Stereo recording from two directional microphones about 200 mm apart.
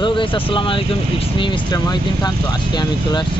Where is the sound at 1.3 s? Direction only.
25° left (ahead or behind).